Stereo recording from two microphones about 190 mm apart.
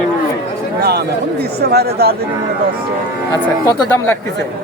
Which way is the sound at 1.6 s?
55° right (ahead or behind).